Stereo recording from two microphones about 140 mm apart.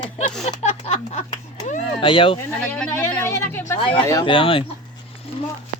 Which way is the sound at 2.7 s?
10° left (ahead or behind).